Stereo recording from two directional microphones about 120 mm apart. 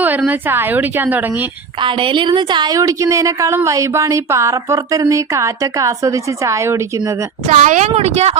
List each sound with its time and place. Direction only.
0.0 s a woman's voice: 15° right (ahead or behind)
1.8 s a woman's voice: 45° right (ahead or behind); by 7.2 s 25° right (ahead or behind)
7.4 s speech: 90° right; by 8.4 s 65° right (ahead or behind)